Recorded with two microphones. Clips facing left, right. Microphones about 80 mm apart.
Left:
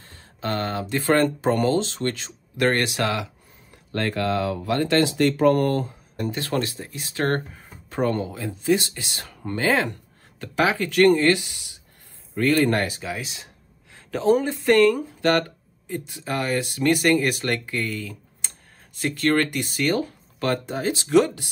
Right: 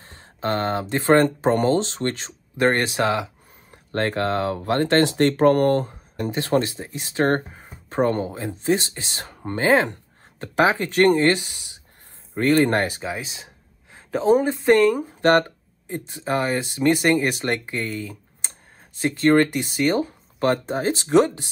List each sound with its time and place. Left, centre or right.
0.0 s speech: right
3.7 s a sound: right
4.1 s speech: right
6.1 s speech: right